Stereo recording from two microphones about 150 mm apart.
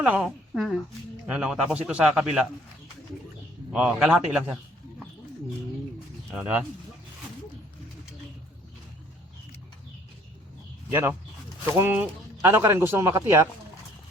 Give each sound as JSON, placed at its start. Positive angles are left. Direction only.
{"t": 0.0, "sound": "a woman's voice", "side_deg": -5}
{"t": 3.7, "sound": "a man's voice", "side_deg": -10}
{"t": 6.3, "sound": "a man's voice", "side_deg": -10}
{"t": 10.9, "sound": "a man's voice", "side_deg": -15}